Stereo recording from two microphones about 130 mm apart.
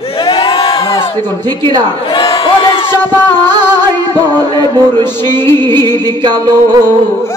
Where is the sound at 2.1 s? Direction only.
45° left (ahead or behind).